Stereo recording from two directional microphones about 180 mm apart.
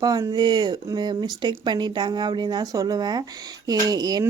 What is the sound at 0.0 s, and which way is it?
Speech, 20° right (ahead or behind).